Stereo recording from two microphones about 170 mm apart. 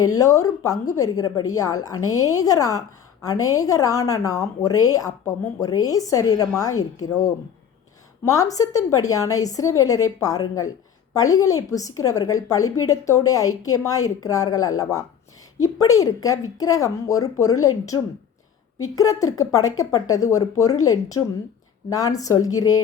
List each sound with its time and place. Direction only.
0.0 s a woman's voice: 20° left (ahead or behind)